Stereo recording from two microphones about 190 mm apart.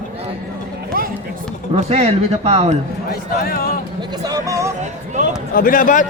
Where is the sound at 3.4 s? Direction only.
50° left (ahead or behind).